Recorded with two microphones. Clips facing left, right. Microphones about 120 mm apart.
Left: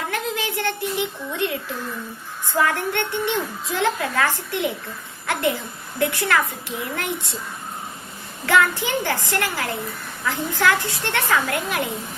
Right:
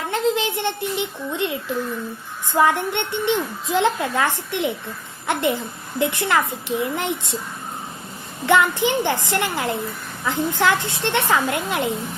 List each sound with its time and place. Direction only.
0.1 s a woman's voice: 25° right (ahead or behind)
8.4 s a woman's voice: 20° right (ahead or behind)